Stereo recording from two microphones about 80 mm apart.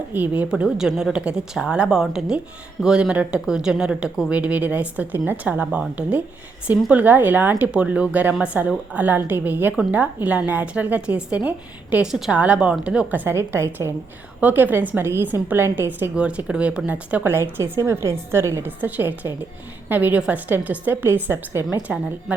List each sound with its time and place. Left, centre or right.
0.1 s a woman's voice: right
0.6 s a woman's voice: centre
12.0 s a woman's voice: centre; by 13.9 s right
14.4 s a woman's voice: right
16.1 s speech: centre
17.3 s a woman's voice: right
18.8 s a woman's voice: right